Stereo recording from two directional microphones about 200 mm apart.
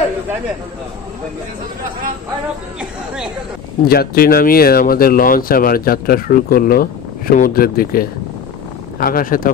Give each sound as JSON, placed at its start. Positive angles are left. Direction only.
{"t": 3.8, "sound": "speech", "side_deg": 50}